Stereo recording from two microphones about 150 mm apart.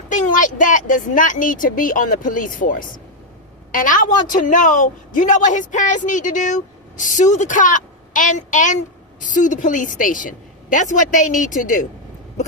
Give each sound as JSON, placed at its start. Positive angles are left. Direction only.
{"t": 0.1, "sound": "a man's voice", "side_deg": 60}